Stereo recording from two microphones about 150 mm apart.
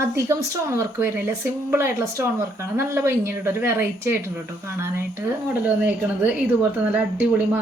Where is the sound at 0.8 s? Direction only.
20° right (ahead or behind).